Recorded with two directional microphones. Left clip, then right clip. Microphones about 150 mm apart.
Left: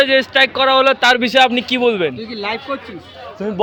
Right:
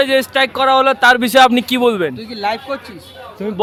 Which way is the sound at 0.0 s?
25° right (ahead or behind).